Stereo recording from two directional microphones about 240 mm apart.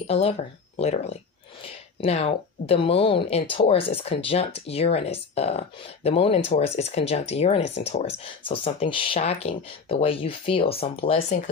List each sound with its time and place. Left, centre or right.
0.0 s speech: left